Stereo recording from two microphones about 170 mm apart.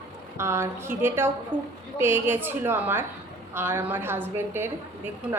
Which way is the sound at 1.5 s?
30° right (ahead or behind).